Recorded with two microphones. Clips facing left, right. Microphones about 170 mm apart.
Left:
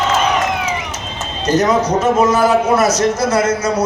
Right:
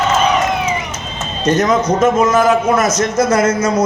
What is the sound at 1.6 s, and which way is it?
A man's voice, 35° left (ahead or behind).